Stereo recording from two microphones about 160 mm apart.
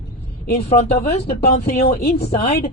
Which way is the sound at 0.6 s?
40° left (ahead or behind).